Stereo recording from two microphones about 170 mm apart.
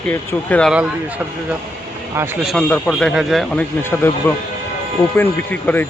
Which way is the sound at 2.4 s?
Centre (ahead or behind).